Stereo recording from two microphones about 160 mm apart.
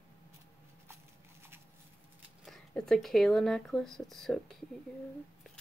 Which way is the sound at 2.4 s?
Centre (ahead or behind).